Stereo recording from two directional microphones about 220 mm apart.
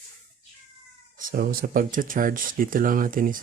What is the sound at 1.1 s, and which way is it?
Speech, 45° right (ahead or behind).